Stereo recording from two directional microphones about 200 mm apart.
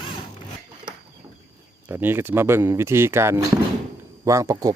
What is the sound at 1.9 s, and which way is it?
Speech, 10° right (ahead or behind).